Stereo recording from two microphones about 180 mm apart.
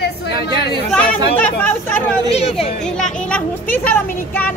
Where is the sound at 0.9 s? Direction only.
5° left (ahead or behind).